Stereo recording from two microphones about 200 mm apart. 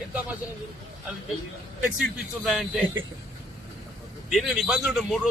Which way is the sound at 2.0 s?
Centre (ahead or behind).